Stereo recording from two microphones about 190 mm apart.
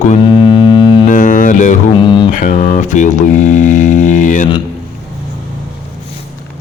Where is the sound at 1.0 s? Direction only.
40° left (ahead or behind).